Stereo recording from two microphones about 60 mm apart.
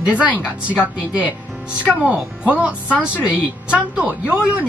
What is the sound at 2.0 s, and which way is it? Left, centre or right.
Speech, centre.